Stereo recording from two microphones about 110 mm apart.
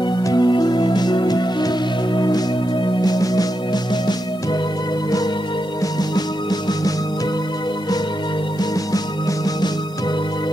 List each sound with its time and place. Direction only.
0.1 s music: 40° left (ahead or behind)